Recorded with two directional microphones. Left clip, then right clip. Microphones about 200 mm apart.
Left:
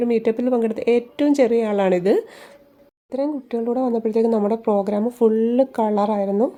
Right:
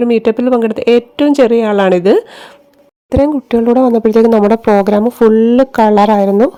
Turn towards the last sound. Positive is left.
turn(degrees=-30)  # may be behind; listen again after turning